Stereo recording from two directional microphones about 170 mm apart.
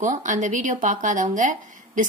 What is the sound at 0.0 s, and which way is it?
Speech, 45° right (ahead or behind).